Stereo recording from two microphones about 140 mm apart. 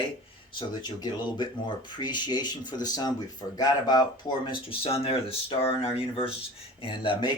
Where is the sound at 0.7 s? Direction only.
30° left (ahead or behind).